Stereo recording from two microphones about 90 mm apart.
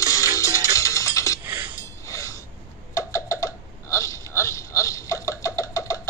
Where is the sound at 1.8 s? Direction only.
35° left (ahead or behind).